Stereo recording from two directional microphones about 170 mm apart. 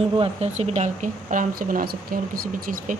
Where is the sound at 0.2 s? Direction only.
40° right (ahead or behind).